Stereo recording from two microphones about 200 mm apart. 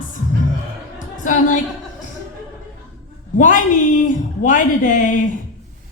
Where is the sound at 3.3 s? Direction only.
40° left (ahead or behind).